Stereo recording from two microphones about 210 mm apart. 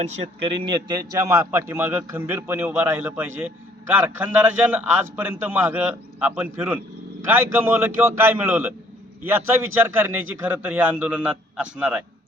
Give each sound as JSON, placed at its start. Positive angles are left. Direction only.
{"t": 0.4, "sound": "a man's voice", "side_deg": -25}